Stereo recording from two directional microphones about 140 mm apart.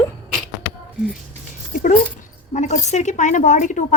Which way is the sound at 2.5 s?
60° left (ahead or behind).